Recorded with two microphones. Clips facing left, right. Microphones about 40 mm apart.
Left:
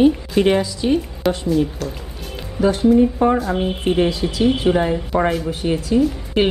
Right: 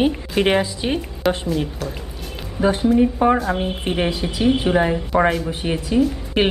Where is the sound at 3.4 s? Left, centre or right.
Centre.